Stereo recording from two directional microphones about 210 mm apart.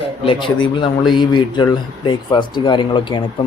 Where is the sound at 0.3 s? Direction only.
25° left (ahead or behind).